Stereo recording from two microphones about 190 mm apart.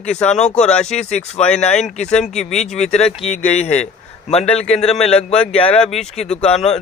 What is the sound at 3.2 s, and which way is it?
Speech, 35° left (ahead or behind).